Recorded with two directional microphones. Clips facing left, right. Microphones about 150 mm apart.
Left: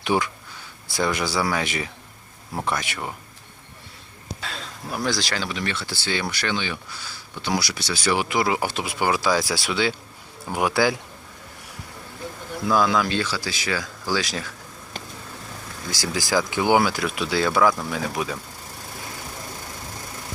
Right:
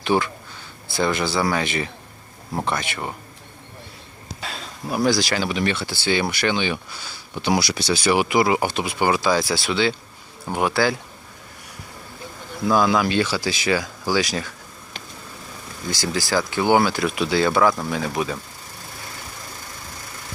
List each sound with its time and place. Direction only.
0.0 s speech: 10° left (ahead or behind)
2.9 s speech: centre (ahead or behind)
4.4 s speech: 5° right (ahead or behind); by 8.1 s 20° right (ahead or behind)
8.1 s speech: 5° right (ahead or behind); by 10.9 s 15° left (ahead or behind)
12.6 s speech: centre (ahead or behind)
14.3 s speech: centre (ahead or behind)
15.9 s speech: 10° left (ahead or behind)
17.0 s speech: centre (ahead or behind)